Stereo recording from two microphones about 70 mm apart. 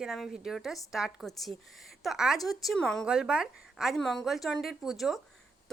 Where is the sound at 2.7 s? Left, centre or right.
Centre.